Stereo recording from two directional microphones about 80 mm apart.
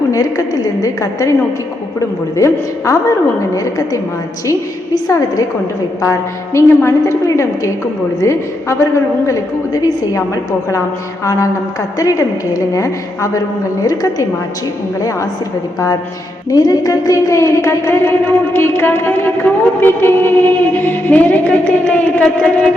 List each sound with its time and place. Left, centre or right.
0.1 s a woman's voice: left
6.0 s a woman's voice: left
11.3 s a woman's voice: left
16.5 s speech: left; by 22.2 s centre
22.2 s a sound: centre